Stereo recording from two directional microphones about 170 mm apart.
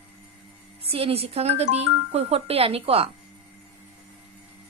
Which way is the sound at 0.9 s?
35° right (ahead or behind).